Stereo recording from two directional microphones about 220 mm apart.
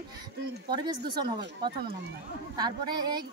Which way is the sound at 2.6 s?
20° right (ahead or behind).